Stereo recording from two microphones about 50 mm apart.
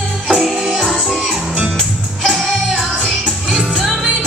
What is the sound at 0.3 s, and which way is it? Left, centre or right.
Music, centre.